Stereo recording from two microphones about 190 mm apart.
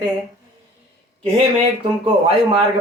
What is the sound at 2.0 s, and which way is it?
Speech, 30° right (ahead or behind).